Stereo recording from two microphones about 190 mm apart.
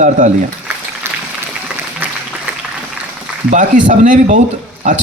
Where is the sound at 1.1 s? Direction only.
10° right (ahead or behind).